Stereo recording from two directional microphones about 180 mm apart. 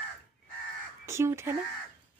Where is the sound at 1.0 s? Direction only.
15° right (ahead or behind).